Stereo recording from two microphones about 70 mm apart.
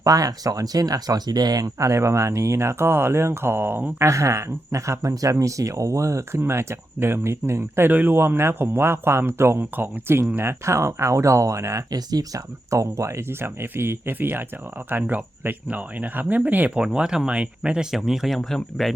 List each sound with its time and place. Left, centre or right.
0.0 s speech: right
4.1 s speech: right
11.9 s speech: right
12.7 s speech: right; by 18.9 s centre